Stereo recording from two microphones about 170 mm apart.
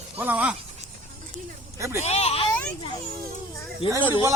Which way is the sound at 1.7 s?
15° right (ahead or behind).